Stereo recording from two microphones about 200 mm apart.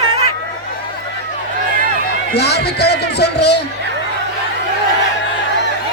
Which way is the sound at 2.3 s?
55° left (ahead or behind).